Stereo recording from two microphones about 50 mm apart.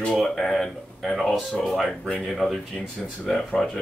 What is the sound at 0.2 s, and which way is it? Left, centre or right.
A man's voice, centre.